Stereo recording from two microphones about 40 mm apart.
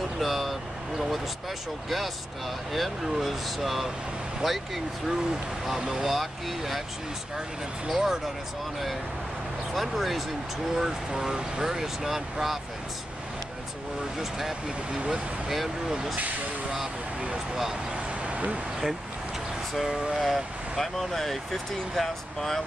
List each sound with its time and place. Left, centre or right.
0.2 s speech: centre
2.7 s speech: centre
5.8 s speech: centre
6.0 s speech: centre
7.9 s speech: centre
9.8 s speech: centre
10.8 s speech: centre
15.0 s speech: centre
18.2 s a sound: right
19.9 s vehicle: right
20.7 s speech: centre